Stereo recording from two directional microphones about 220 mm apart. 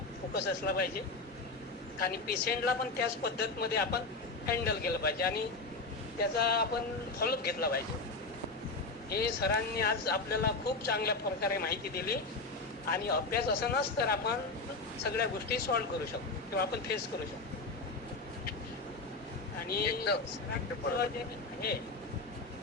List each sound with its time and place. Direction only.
0.3 s speech: 45° left (ahead or behind)
2.0 s speech: 45° left (ahead or behind)
9.0 s speech: 45° left (ahead or behind)
19.6 s speech: 45° left (ahead or behind)